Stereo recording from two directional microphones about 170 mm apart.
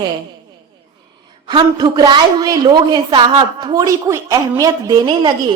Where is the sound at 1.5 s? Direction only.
25° right (ahead or behind).